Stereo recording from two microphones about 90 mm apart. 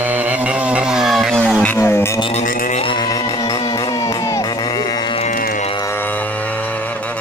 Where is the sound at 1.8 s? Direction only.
30° left (ahead or behind).